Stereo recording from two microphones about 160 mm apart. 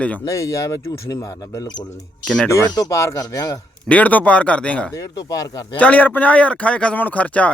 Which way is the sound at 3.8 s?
10° left (ahead or behind).